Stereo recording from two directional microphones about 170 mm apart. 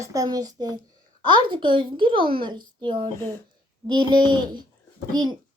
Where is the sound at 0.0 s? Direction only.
20° right (ahead or behind).